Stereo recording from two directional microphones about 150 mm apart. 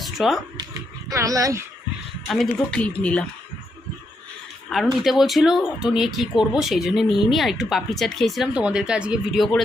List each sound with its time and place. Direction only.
0.0 s cat: centre (ahead or behind)
0.5 s speech: 20° right (ahead or behind)
2.3 s speech: 5° left (ahead or behind)
4.7 s speech: centre (ahead or behind)